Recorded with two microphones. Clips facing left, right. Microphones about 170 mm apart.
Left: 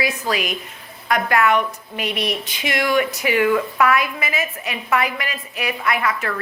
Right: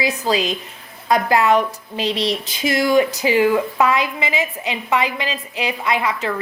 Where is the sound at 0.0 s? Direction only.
25° right (ahead or behind).